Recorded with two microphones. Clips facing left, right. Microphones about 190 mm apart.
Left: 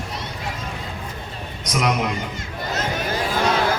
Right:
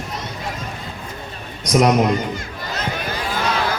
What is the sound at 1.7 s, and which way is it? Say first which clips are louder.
Speech: right 7 dB; 40° right (ahead or behind).